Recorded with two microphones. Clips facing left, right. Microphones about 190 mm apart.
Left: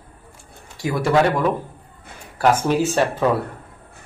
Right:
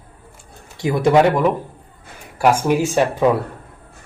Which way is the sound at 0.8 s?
20° right (ahead or behind).